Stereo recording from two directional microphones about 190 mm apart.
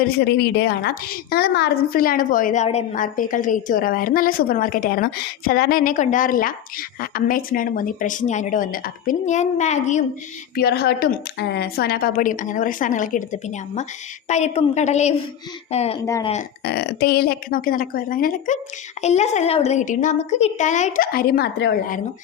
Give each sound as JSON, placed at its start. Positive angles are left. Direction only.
{"t": 0.0, "sound": "a woman's voice", "side_deg": 55}
{"t": 10.5, "sound": "a woman's voice", "side_deg": 55}
{"t": 16.0, "sound": "speech", "side_deg": 15}
{"t": 16.6, "sound": "a woman's voice", "side_deg": 60}